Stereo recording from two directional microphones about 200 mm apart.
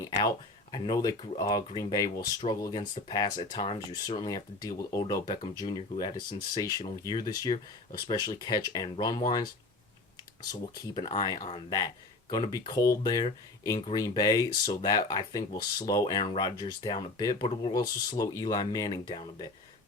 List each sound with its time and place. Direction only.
0.0 s speech: 20° left (ahead or behind)
10.5 s speech: 20° left (ahead or behind)